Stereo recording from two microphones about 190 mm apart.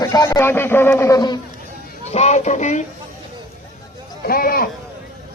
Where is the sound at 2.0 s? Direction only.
35° left (ahead or behind).